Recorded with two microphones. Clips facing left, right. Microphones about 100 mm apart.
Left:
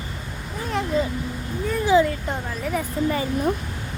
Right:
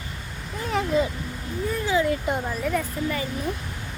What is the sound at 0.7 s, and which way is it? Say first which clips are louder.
Speech: even; 5° right (ahead or behind).